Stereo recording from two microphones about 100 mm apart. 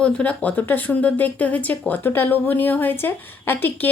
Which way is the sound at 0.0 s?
10° left (ahead or behind).